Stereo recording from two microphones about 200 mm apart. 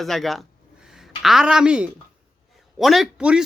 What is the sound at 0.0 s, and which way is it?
A man's voice, centre (ahead or behind).